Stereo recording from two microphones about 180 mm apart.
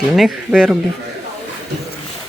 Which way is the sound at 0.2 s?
5° right (ahead or behind).